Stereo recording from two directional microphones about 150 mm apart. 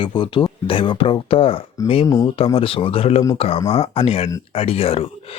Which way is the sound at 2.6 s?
35° left (ahead or behind).